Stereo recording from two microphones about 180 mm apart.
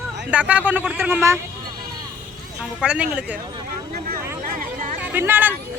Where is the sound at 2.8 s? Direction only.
5° right (ahead or behind).